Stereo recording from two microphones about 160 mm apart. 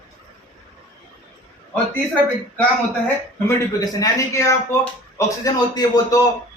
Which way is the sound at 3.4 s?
20° left (ahead or behind).